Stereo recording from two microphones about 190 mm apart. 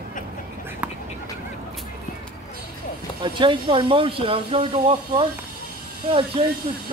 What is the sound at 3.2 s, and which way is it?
Speech, 25° right (ahead or behind).